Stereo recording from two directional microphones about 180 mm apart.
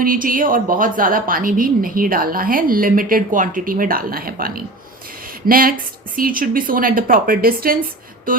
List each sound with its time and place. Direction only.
0.0 s a woman's voice: 50° right (ahead or behind)